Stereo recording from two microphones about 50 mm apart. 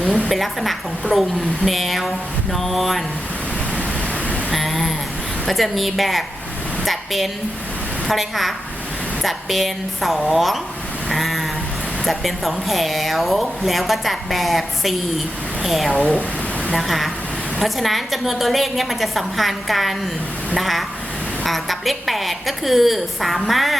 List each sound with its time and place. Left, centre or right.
0.3 s speech: centre
4.5 s a sound: centre
5.5 s a woman's voice: centre
11.1 s a sound: centre
12.0 s speech: centre
16.0 s speech: left
16.7 s speech: centre